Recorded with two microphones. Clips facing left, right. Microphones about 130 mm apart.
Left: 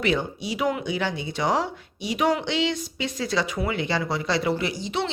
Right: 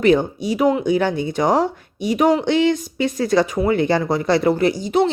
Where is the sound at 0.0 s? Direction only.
45° right (ahead or behind).